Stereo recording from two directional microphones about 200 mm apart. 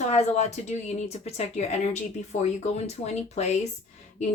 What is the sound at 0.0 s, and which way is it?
Speech, 35° left (ahead or behind).